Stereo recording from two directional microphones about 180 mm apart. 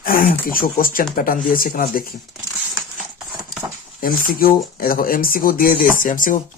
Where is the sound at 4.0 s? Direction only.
55° left (ahead or behind).